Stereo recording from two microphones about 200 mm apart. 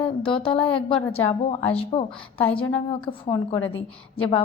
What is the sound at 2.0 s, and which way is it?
Speech, 10° left (ahead or behind).